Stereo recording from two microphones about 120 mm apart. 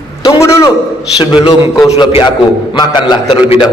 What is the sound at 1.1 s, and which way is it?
A man's voice, 35° left (ahead or behind).